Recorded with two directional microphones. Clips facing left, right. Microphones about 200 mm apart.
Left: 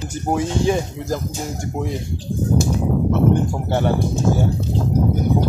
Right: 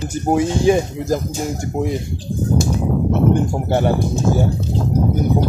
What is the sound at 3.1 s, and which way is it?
Speech, 15° right (ahead or behind).